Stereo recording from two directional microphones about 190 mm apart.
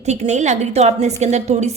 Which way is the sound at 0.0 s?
35° right (ahead or behind).